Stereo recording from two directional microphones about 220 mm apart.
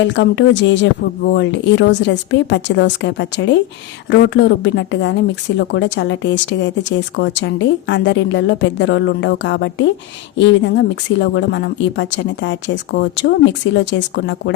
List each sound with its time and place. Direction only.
0.0 s speech: 55° left (ahead or behind)